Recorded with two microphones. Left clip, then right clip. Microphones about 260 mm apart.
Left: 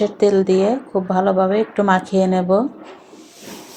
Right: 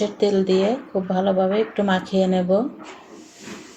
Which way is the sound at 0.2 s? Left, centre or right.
Left.